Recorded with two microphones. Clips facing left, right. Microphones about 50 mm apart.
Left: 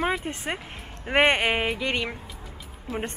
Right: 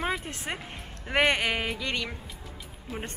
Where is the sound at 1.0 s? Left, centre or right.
Left.